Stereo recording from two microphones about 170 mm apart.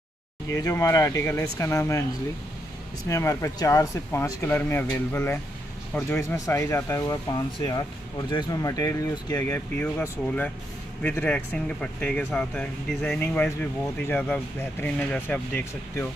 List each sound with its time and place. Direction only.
0.5 s speech: 20° left (ahead or behind)
3.1 s speech: 20° left (ahead or behind)
8.3 s speech: 25° left (ahead or behind)
9.8 s speech: 10° left (ahead or behind)